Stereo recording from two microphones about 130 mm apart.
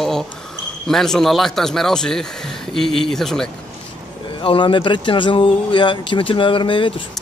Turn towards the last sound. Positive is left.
turn(degrees=40)  # may be behind; listen again after turning